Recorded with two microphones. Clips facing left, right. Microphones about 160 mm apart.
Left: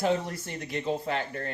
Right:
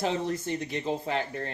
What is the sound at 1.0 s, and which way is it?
Speech, 35° right (ahead or behind).